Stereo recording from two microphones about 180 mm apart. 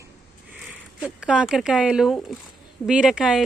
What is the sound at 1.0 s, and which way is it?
Speech, 5° right (ahead or behind).